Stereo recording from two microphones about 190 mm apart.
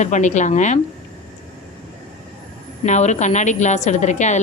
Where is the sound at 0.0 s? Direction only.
40° left (ahead or behind).